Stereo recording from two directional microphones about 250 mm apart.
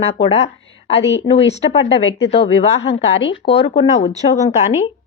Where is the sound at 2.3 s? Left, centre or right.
Left.